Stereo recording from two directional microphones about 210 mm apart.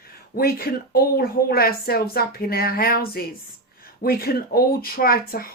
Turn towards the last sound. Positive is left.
turn(degrees=45)  # may be behind; listen again after turning